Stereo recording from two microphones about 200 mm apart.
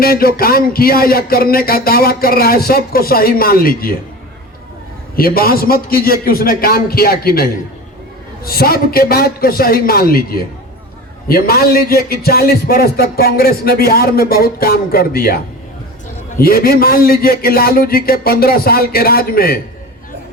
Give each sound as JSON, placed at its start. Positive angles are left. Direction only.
{"t": 0.0, "sound": "a man's voice", "side_deg": 50}
{"t": 5.1, "sound": "a man's voice", "side_deg": 50}
{"t": 8.4, "sound": "a man's voice", "side_deg": 50}